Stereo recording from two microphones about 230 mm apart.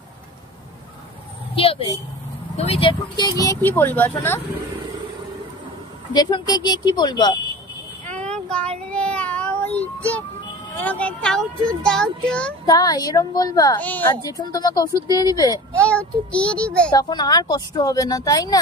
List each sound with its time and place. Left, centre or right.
1.5 s a sound: left
2.5 s a woman's voice: left; by 4.4 s centre
6.1 s a woman's voice: centre
8.1 s child singing: right
8.5 s child singing: centre
10.8 s speech: centre
12.6 s a woman's voice: centre
15.7 s a child's voice: centre
16.9 s a woman's voice: centre